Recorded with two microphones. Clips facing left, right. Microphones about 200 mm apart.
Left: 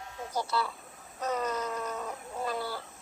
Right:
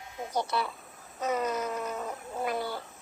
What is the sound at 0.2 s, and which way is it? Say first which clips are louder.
Speech: right 1 dB; 20° right (ahead or behind).